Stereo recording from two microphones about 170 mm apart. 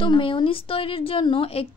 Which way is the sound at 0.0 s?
30° left (ahead or behind).